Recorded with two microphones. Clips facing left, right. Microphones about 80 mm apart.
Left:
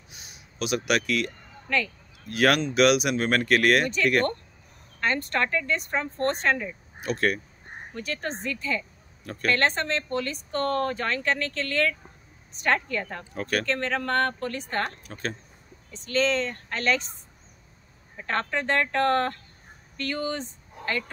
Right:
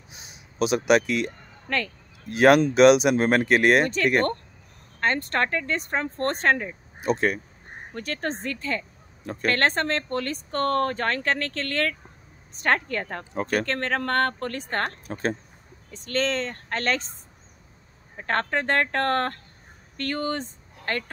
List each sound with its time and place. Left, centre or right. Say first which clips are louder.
0.1 s crow: right 2 dB; right
1.7 s speech: left 1 dB; right
2.2 s speech: right 6 dB; right
5.0 s speech: right 2 dB; right
7.9 s speech: right 2 dB; right
9.2 s speech: right 3 dB; right
9.5 s speech: right 1 dB; right
13.3 s speech: right 3 dB; right
13.7 s speech: right 1 dB; right
14.7 s speech: right 2 dB; right
18.2 s speech: right 2 dB; right